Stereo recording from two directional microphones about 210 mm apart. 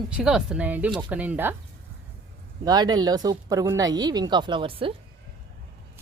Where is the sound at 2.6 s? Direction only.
20° right (ahead or behind).